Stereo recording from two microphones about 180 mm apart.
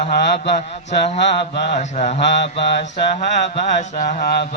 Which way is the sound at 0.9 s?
40° left (ahead or behind).